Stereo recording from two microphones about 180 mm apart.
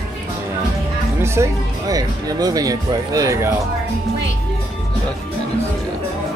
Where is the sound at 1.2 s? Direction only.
15° right (ahead or behind).